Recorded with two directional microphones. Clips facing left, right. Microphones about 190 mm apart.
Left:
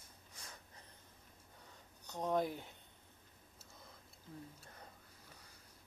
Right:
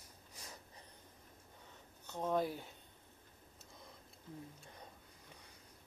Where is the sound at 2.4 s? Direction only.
20° left (ahead or behind).